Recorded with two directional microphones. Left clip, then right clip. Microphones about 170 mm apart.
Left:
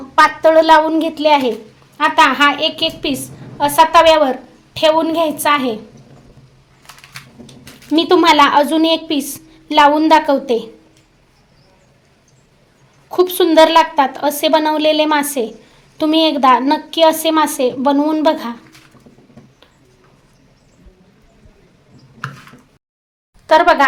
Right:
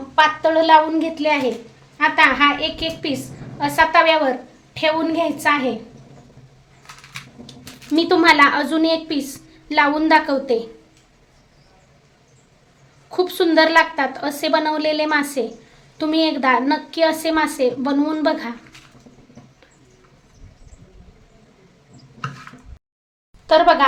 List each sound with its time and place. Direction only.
0.2 s a woman's voice: 40° left (ahead or behind)
7.9 s a woman's voice: 30° left (ahead or behind)
13.1 s a woman's voice: 35° left (ahead or behind)
23.5 s speech: 30° left (ahead or behind)